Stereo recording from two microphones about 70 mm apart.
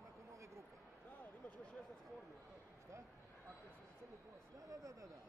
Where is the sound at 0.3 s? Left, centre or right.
Right.